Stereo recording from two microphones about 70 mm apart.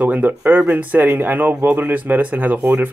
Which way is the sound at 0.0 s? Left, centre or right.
Right.